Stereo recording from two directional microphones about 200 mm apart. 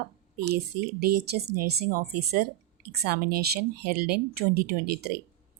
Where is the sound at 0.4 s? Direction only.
50° right (ahead or behind).